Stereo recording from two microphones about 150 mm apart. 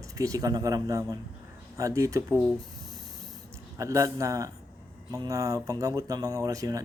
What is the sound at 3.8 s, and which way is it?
Speech, 20° right (ahead or behind).